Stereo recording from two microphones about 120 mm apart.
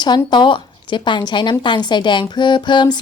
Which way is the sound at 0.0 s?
40° left (ahead or behind).